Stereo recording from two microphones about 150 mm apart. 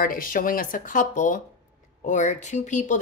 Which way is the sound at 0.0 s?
70° left (ahead or behind).